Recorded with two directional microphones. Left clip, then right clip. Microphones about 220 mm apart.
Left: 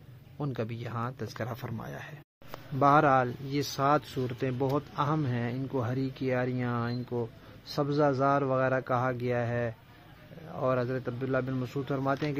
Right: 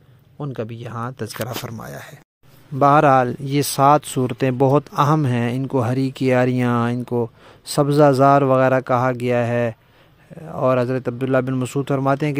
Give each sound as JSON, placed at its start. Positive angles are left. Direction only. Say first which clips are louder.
{"t": 0.4, "sound": "speech", "louder": "right 7 dB", "side_deg": -30}
{"t": 1.1, "sound": "speech", "louder": "right 10 dB", "side_deg": -40}
{"t": 1.6, "sound": "speech", "louder": "right 8 dB", "side_deg": -25}
{"t": 2.8, "sound": "speech", "louder": "right 10 dB", "side_deg": -50}